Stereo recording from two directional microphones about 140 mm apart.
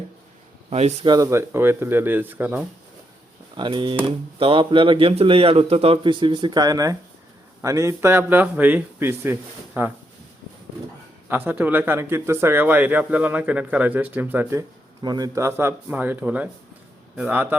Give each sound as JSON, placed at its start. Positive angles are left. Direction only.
{"t": 0.7, "sound": "speech", "side_deg": -50}
{"t": 1.0, "sound": "speech", "side_deg": -25}
{"t": 3.6, "sound": "speech", "side_deg": -35}
{"t": 11.3, "sound": "speech", "side_deg": -15}
{"t": 15.0, "sound": "speech", "side_deg": -30}